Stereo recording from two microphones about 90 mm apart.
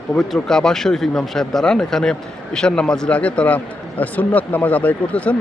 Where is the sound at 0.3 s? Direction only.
5° left (ahead or behind).